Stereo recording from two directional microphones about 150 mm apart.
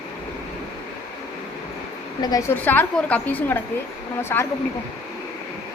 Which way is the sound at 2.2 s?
25° left (ahead or behind).